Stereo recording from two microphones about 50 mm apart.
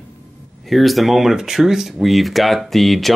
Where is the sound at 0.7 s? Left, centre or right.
Centre.